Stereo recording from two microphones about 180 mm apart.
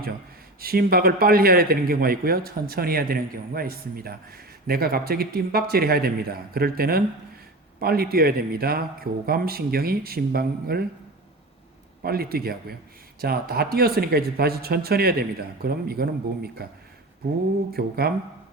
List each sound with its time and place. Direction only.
0.6 s a man's voice: 55° right (ahead or behind)
12.0 s a man's voice: 55° right (ahead or behind)
17.7 s a man's voice: 60° right (ahead or behind)